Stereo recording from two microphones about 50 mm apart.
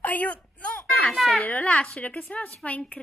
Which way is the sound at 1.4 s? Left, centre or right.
Left.